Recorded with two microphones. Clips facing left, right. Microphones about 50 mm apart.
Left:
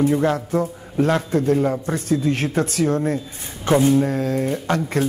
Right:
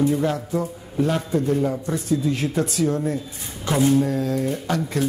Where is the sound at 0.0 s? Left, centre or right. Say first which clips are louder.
Left 3 dB; left.